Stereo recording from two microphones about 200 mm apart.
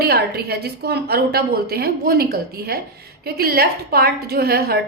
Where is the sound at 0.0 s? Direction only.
50° right (ahead or behind).